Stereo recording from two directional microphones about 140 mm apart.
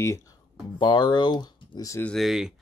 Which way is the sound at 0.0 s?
20° left (ahead or behind).